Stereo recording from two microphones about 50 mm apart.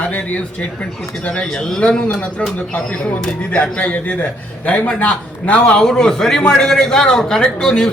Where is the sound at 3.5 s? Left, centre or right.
Left.